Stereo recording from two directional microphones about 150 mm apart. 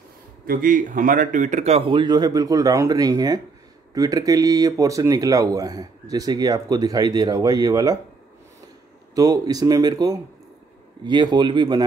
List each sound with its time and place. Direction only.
0.5 s speech: 65° right (ahead or behind); by 8.0 s 25° right (ahead or behind)
9.1 s speech: 25° right (ahead or behind)